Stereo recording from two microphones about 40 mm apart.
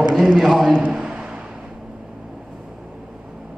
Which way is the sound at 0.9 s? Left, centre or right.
Right.